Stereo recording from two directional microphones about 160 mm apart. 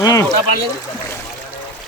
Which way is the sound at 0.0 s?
20° left (ahead or behind).